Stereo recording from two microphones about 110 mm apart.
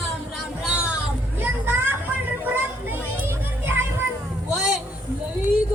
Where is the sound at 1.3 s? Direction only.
20° right (ahead or behind).